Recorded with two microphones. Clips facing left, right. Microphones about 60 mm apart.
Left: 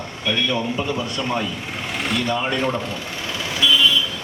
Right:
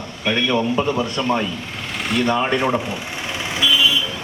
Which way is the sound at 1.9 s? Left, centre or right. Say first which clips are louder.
Right 1 dB; centre.